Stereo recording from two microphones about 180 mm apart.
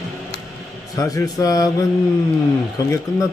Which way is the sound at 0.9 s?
20° left (ahead or behind).